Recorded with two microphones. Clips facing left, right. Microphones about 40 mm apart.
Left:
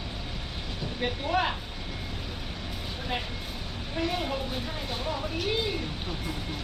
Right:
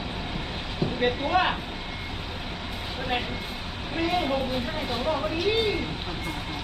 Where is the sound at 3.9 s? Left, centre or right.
Right.